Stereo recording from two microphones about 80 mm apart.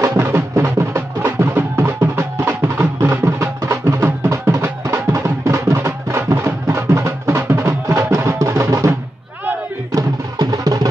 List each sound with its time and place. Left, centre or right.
0.0 s music: right
9.9 s music: right